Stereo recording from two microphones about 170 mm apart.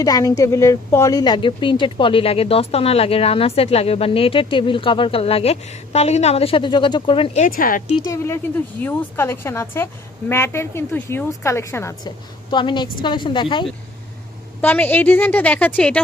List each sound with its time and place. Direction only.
0.0 s a woman's voice: 20° left (ahead or behind)
7.3 s speech: 55° left (ahead or behind)
7.9 s a woman's voice: 20° left (ahead or behind)
14.6 s a woman's voice: 10° left (ahead or behind)